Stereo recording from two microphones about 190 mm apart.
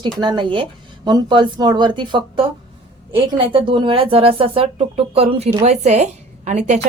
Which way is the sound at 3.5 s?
25° right (ahead or behind).